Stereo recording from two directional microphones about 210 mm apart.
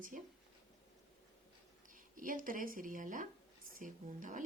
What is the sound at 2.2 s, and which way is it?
A woman's voice, 40° right (ahead or behind).